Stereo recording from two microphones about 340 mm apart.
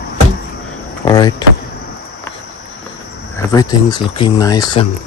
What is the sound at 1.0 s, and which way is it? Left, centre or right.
Vehicle, centre.